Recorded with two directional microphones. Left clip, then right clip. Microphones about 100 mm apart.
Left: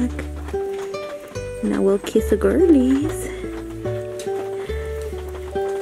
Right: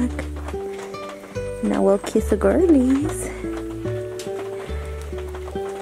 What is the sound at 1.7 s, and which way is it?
Speech, 10° right (ahead or behind).